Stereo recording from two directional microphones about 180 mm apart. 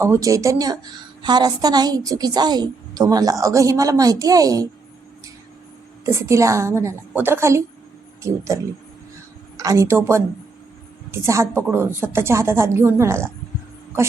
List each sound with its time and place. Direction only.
0.0 s a woman's voice: 15° right (ahead or behind)
6.1 s a woman's voice: 15° right (ahead or behind)